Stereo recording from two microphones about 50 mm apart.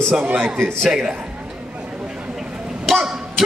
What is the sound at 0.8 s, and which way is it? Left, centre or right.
Speech, centre.